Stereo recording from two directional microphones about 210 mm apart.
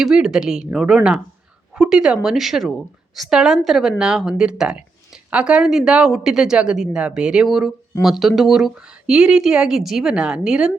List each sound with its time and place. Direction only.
0.0 s a woman's voice: 5° right (ahead or behind)